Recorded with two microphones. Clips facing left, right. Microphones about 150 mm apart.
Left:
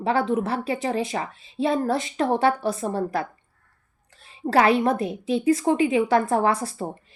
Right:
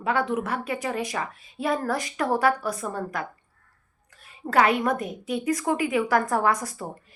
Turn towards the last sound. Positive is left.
turn(degrees=30)  # may be behind; listen again after turning